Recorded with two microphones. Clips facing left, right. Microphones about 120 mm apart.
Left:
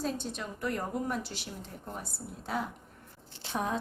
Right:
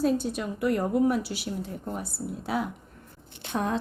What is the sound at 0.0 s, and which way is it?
A woman's voice, 5° right (ahead or behind).